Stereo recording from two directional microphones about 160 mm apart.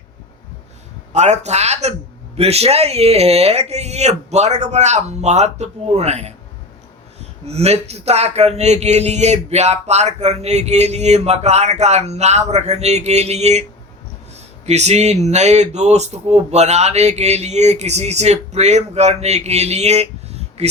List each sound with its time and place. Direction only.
1.1 s speech: 45° right (ahead or behind)
7.4 s speech: 40° right (ahead or behind)